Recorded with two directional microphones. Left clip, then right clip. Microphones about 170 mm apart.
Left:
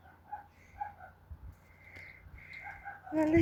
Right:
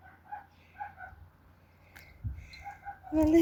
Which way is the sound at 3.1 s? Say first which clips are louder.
Right 3 dB; 25° right (ahead or behind).